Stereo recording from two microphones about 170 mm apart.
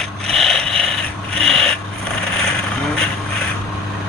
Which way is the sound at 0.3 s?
5° left (ahead or behind).